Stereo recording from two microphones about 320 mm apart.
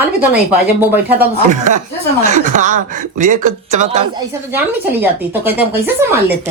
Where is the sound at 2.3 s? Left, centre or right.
Right.